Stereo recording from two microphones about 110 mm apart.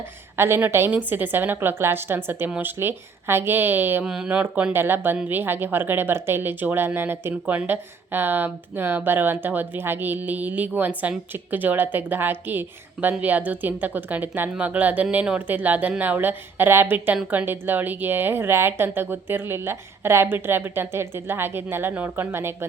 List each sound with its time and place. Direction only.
0.3 s a woman's voice: 20° right (ahead or behind)